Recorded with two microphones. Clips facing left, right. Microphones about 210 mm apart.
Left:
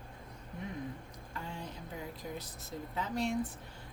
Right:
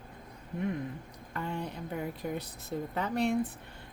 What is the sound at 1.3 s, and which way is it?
Speech, 60° right (ahead or behind).